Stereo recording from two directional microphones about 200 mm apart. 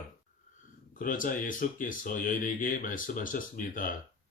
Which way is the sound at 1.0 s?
40° left (ahead or behind).